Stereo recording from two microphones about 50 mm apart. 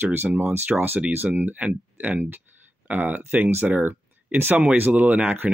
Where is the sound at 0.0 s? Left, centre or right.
Right.